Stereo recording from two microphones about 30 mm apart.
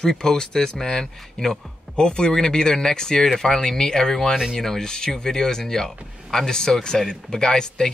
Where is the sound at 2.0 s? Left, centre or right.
Left.